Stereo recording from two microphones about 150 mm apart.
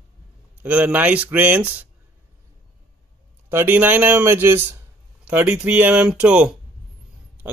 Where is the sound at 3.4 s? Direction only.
15° right (ahead or behind).